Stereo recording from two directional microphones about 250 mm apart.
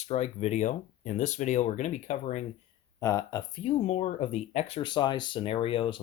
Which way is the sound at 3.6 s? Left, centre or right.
Left.